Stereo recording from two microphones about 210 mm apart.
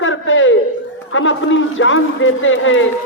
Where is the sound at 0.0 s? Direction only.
65° left (ahead or behind).